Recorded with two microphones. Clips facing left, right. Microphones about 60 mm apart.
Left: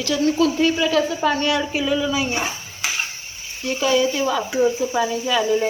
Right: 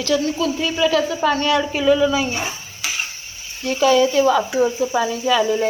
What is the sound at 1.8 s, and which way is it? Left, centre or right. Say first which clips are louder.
Speech: right 9 dB; centre.